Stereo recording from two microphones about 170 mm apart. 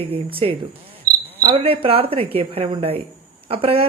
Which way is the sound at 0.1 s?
30° right (ahead or behind).